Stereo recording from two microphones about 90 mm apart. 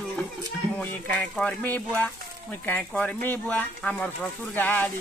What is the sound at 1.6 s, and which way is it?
Speech, 15° left (ahead or behind).